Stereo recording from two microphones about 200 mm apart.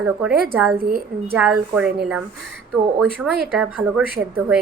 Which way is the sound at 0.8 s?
45° right (ahead or behind).